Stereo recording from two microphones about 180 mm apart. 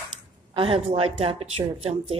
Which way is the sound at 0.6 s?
30° right (ahead or behind).